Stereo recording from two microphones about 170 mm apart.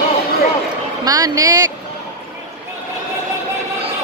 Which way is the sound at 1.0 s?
20° right (ahead or behind).